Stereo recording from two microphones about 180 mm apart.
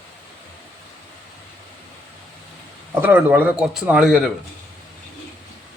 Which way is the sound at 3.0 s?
10° right (ahead or behind).